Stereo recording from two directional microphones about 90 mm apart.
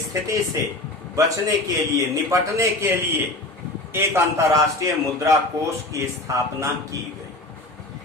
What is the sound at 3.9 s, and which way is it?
Speech, 30° right (ahead or behind).